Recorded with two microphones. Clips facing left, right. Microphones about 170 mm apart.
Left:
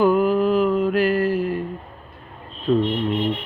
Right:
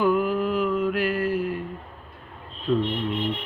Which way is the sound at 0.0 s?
35° left (ahead or behind).